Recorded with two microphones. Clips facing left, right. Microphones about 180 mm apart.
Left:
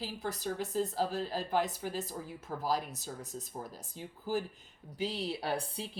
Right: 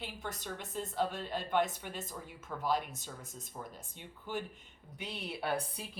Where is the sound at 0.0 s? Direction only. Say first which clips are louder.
Left 5 dB; 35° left (ahead or behind).